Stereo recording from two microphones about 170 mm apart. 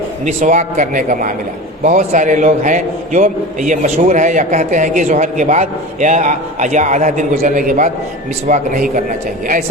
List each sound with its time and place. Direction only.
0.3 s a man's voice: 50° right (ahead or behind)